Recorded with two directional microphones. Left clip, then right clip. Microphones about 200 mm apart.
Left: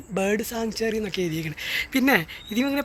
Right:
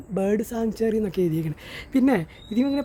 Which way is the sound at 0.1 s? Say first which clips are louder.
Even; 5° right (ahead or behind).